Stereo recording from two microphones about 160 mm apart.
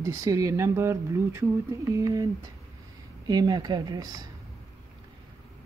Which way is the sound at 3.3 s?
25° right (ahead or behind).